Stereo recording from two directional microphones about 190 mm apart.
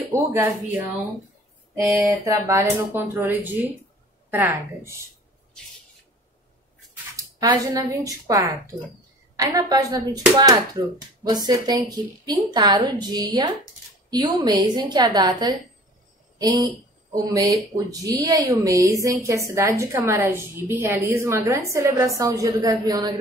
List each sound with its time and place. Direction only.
0.1 s a woman's voice: 15° right (ahead or behind)
1.8 s a woman's voice: 10° right (ahead or behind)
7.3 s a woman's voice: 20° right (ahead or behind)
18.0 s a woman's voice: 20° right (ahead or behind)